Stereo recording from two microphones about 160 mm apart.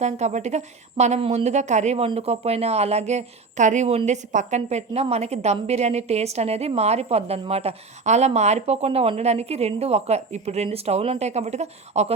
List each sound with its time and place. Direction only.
0.0 s speech: 45° right (ahead or behind)